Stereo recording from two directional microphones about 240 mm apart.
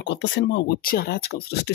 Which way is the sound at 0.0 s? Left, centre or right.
Left.